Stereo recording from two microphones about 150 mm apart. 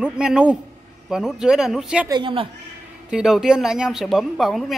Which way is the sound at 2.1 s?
35° right (ahead or behind).